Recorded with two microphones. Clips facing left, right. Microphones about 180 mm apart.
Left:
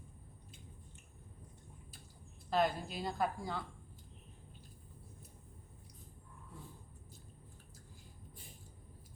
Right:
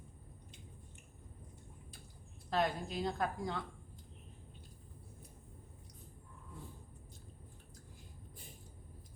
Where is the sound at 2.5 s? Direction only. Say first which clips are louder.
Left 1 dB; 5° left (ahead or behind).